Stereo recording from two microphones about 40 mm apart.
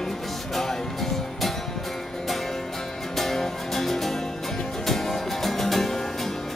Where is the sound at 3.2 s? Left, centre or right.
Centre.